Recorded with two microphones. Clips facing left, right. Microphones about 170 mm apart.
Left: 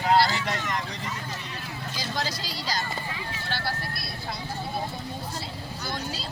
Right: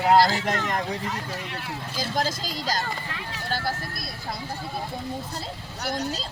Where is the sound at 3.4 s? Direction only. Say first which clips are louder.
Right 4 dB; 40° right (ahead or behind).